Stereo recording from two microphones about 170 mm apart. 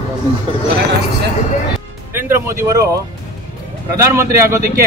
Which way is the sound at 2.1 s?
15° right (ahead or behind).